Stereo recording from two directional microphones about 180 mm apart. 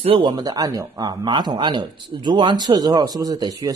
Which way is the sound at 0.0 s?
30° right (ahead or behind).